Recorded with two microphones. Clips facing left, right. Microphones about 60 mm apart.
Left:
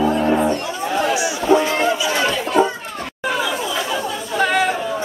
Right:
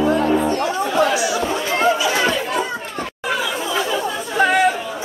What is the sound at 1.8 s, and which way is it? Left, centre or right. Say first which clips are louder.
Chatter: right 2 dB; right.